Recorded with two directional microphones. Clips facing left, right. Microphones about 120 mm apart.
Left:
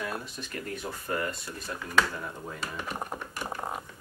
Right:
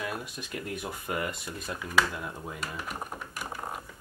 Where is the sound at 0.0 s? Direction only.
15° right (ahead or behind).